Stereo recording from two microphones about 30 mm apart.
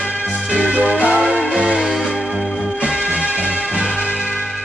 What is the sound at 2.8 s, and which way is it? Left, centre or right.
Music, right.